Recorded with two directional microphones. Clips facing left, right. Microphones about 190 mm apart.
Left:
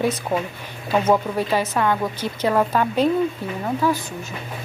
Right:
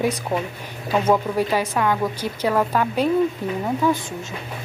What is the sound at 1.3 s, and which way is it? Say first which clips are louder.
A woman's voice: even; 10° right (ahead or behind).